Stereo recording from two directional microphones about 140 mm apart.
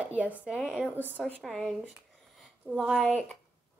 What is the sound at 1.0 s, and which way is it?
Speech, 15° right (ahead or behind).